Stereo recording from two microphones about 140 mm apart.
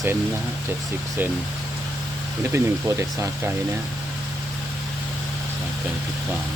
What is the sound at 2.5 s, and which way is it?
Speech, 20° right (ahead or behind).